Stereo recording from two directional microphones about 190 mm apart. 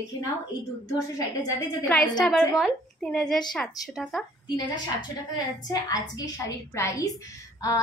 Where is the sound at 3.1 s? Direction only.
5° left (ahead or behind).